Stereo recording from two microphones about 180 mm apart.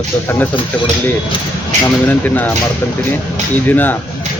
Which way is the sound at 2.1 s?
10° left (ahead or behind).